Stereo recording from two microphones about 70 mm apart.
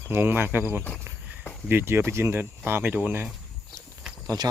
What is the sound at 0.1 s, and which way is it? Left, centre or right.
Speech, right.